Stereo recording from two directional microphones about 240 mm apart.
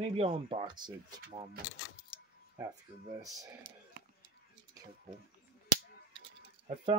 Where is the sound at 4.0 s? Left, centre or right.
Right.